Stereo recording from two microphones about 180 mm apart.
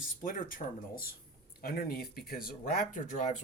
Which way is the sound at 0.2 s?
45° left (ahead or behind).